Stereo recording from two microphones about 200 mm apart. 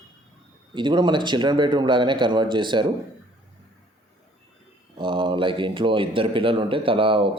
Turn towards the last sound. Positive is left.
turn(degrees=-25)  # may be behind; listen again after turning